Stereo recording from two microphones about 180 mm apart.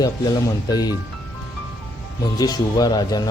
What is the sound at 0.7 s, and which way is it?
Speech, 20° left (ahead or behind).